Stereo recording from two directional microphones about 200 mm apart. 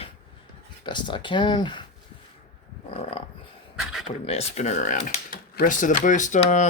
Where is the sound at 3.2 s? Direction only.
25° left (ahead or behind).